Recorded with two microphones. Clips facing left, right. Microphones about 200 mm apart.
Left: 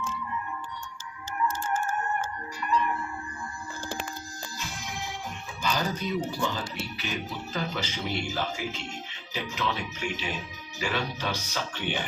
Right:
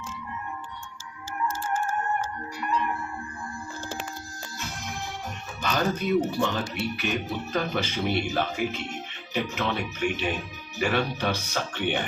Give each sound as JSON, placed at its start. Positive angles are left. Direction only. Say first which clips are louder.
{"t": 5.6, "sound": "speech", "louder": "right 4 dB", "side_deg": -55}